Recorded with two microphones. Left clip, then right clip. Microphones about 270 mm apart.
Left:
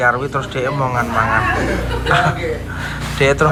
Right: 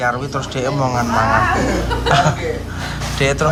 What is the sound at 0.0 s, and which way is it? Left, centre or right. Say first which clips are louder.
A man's voice: left 4 dB; centre.